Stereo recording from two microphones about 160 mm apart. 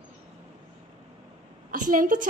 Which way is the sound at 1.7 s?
60° right (ahead or behind).